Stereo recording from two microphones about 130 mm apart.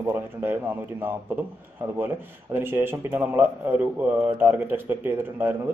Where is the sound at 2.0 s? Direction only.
15° right (ahead or behind).